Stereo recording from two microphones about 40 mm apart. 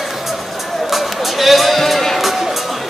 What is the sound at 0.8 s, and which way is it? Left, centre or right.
Music, centre.